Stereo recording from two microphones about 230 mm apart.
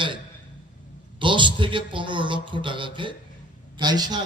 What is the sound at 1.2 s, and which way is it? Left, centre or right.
A man's voice, right.